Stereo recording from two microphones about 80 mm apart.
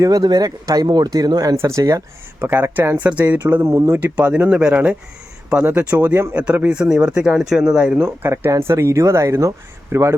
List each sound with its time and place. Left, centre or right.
0.2 s speech: right
1.5 s speech: right
2.4 s speech: right
3.0 s speech: centre
3.6 s speech: right
4.0 s speech: centre
8.0 s speech: right